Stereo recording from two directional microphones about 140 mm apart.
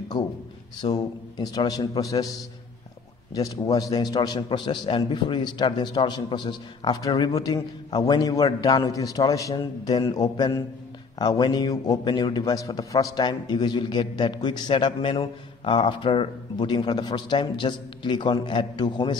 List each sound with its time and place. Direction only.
0.8 s a man's voice: 40° left (ahead or behind)
3.3 s a man's voice: 25° left (ahead or behind)